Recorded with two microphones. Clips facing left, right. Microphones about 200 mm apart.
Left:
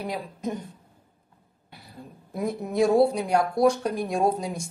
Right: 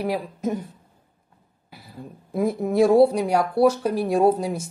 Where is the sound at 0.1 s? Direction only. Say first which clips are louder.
Right 5 dB; 5° right (ahead or behind).